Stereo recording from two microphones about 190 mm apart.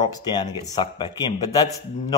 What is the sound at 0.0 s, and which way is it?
Speech, 20° left (ahead or behind).